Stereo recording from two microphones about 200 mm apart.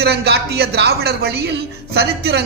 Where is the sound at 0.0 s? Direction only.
55° right (ahead or behind).